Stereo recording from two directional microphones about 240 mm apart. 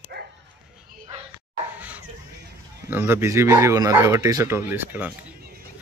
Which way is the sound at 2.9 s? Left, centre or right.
Centre.